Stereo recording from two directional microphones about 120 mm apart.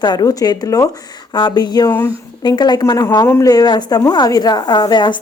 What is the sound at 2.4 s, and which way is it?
Speech, 35° left (ahead or behind).